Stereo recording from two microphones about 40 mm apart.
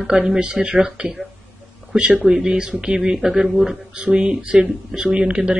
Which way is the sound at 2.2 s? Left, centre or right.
Centre.